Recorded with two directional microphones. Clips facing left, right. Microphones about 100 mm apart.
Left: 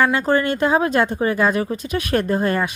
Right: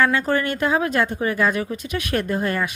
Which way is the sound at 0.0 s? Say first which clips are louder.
Left 2 dB; 25° left (ahead or behind).